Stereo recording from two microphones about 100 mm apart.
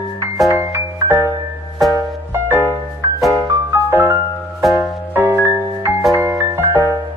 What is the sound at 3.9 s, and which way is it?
Music, 25° right (ahead or behind).